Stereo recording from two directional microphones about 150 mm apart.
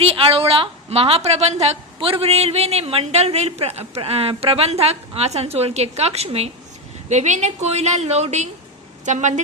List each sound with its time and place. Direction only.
0.0 s a woman's voice: 40° right (ahead or behind)